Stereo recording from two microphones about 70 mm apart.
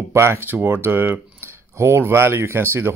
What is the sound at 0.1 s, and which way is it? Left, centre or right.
Speech, right.